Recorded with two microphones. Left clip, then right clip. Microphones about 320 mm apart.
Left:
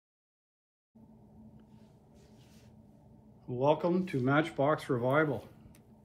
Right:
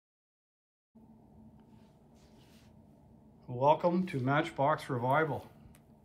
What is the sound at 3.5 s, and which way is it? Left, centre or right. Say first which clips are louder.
Speech: right 1 dB; centre.